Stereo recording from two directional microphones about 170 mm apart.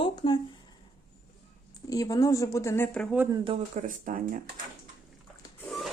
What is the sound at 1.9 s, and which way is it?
A woman's voice, 20° left (ahead or behind).